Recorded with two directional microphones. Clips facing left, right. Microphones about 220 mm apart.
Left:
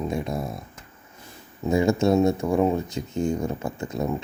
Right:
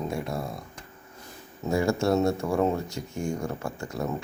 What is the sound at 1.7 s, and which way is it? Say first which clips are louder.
Speech: left 4 dB; 20° left (ahead or behind).